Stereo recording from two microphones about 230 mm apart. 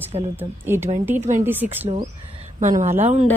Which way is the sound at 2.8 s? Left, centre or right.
Right.